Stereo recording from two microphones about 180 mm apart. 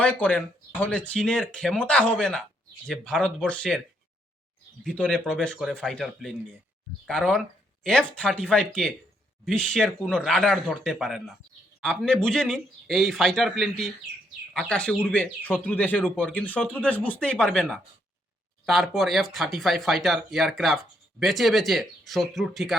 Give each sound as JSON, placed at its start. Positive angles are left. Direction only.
{"t": 0.0, "sound": "speech", "side_deg": 10}
{"t": 4.8, "sound": "speech", "side_deg": 5}